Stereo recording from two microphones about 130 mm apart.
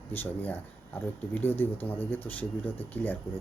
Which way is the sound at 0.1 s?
15° left (ahead or behind).